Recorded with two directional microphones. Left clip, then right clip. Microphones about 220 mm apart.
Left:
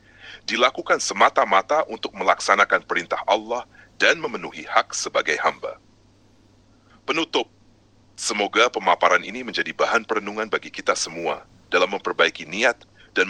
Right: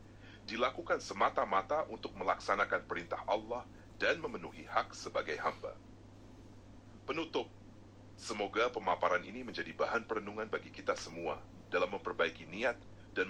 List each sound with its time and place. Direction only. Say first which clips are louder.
0.2 s a man's voice: left 16 dB; 40° left (ahead or behind)
7.0 s a woman's voice: left 15 dB; 40° left (ahead or behind)